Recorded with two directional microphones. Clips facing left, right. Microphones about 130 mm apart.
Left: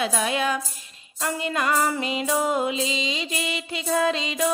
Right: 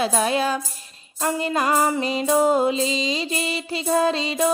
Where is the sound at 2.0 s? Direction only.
35° right (ahead or behind).